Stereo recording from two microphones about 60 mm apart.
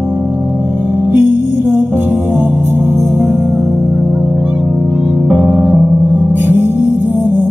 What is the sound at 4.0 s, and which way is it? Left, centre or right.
Music, right.